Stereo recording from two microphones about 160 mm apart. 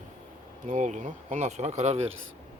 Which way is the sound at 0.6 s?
50° right (ahead or behind).